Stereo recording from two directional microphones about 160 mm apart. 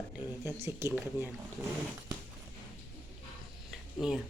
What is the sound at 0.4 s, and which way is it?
Speech, 15° right (ahead or behind).